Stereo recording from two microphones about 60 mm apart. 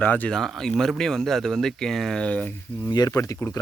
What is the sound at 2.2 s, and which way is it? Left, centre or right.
Speech, left.